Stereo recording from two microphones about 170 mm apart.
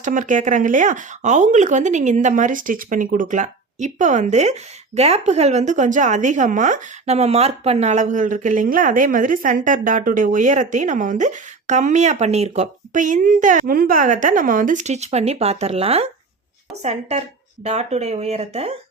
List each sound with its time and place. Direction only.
0.0 s a woman's voice: 50° right (ahead or behind)